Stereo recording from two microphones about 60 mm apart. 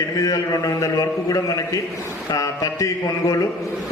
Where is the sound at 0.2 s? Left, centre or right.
Left.